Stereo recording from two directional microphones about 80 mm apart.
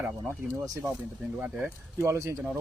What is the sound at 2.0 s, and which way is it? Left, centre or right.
Speech, right.